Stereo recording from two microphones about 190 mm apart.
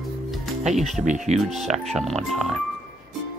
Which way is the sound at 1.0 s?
35° right (ahead or behind).